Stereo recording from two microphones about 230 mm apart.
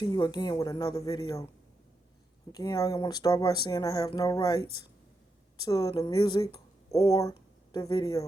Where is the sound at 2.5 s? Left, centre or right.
Centre.